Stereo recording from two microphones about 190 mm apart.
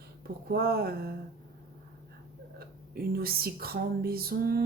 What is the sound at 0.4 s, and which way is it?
Speech, 55° right (ahead or behind).